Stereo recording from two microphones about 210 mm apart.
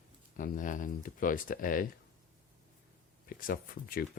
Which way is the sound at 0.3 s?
40° left (ahead or behind).